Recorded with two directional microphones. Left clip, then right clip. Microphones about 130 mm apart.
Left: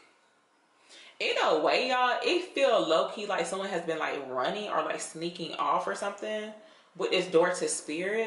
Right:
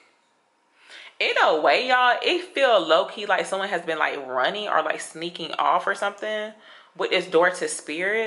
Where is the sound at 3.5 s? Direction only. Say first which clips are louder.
Right 6 dB; 25° left (ahead or behind).